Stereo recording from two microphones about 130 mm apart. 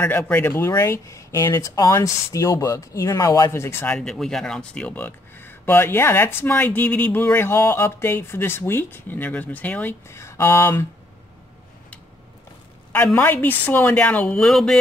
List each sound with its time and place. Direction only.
0.0 s speech: 10° left (ahead or behind)
3.9 s speech: 5° left (ahead or behind); by 10.9 s 20° left (ahead or behind)
12.9 s speech: 15° left (ahead or behind)